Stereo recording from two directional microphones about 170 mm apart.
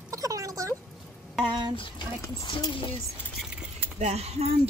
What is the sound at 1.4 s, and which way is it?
Speech, 30° right (ahead or behind).